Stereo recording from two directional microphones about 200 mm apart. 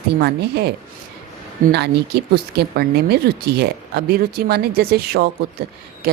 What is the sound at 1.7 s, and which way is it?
Speech, 55° right (ahead or behind).